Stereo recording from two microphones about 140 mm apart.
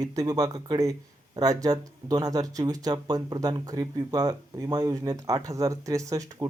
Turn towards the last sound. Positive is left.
turn(degrees=-25)  # may be behind; listen again after turning